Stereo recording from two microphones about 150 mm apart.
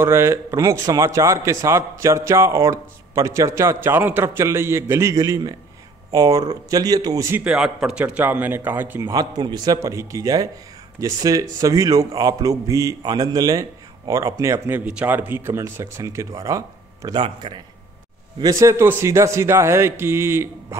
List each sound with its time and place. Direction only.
0.0 s a man's voice: 15° right (ahead or behind)
7.3 s a man's voice: 5° right (ahead or behind)
9.1 s a man's voice: 25° right (ahead or behind)